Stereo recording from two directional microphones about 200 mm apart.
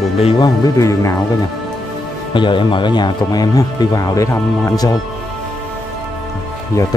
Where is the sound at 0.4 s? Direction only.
15° left (ahead or behind).